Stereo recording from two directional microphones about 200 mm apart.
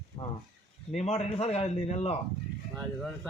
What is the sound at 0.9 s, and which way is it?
A man's voice, 30° left (ahead or behind).